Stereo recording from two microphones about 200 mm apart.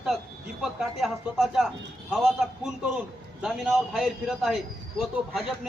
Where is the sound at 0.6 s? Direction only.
Centre (ahead or behind).